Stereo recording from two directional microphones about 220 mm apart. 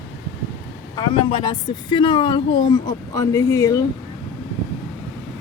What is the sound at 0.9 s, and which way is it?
A woman's voice, 25° left (ahead or behind).